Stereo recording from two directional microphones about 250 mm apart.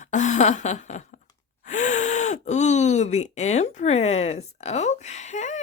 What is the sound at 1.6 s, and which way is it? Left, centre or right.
Speech, left.